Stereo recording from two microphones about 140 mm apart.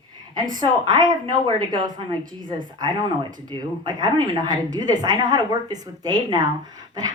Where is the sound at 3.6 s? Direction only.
30° right (ahead or behind).